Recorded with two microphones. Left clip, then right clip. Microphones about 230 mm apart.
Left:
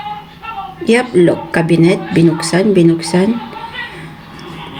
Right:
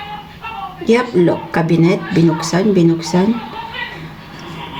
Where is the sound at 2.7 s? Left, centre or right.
Right.